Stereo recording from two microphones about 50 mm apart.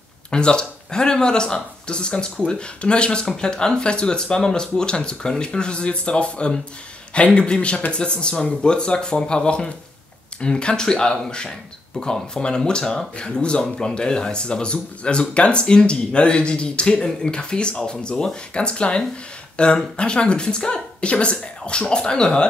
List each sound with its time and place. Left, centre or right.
0.3 s speech: centre